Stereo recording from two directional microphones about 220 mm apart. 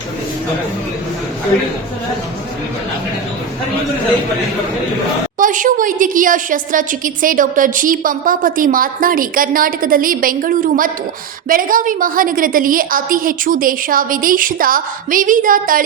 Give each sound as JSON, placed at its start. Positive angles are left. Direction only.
{"t": 5.4, "sound": "a woman's voice", "side_deg": -35}